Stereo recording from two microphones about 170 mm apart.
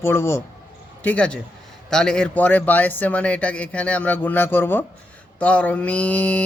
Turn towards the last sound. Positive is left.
turn(degrees=10)  # may be behind; listen again after turning